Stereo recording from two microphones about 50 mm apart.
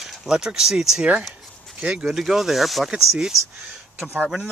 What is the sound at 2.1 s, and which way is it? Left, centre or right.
Speech, centre.